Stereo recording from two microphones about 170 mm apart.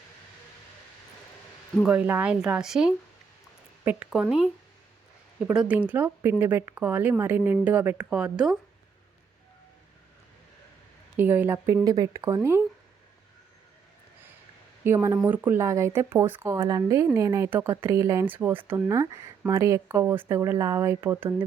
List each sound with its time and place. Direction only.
1.7 s a woman's voice: 5° right (ahead or behind)
11.2 s speech: 10° right (ahead or behind)
14.8 s speech: 15° right (ahead or behind)